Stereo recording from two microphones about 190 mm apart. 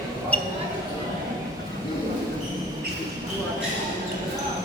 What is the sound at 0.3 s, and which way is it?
Basketball bounce, 5° left (ahead or behind).